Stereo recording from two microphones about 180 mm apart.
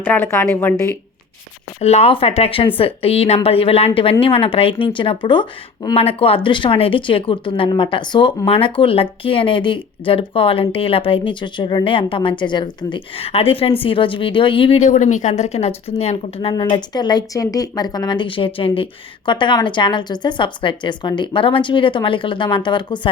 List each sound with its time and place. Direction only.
0.0 s a woman's voice: 10° left (ahead or behind)
1.8 s speech: 35° left (ahead or behind)